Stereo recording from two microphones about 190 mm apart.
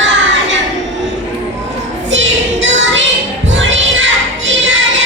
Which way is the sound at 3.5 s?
75° right (ahead or behind).